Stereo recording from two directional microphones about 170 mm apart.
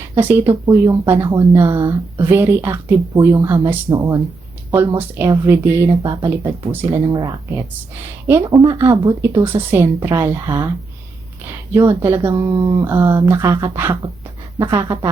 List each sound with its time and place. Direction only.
0.2 s speech: 10° right (ahead or behind)
11.7 s speech: 15° right (ahead or behind)
12.3 s speech: 30° right (ahead or behind)
12.8 s speech: 10° right (ahead or behind)